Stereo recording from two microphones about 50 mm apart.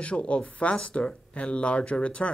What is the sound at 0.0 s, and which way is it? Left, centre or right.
Speech, left.